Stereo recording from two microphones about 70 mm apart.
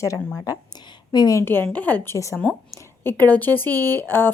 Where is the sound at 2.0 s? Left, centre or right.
Left.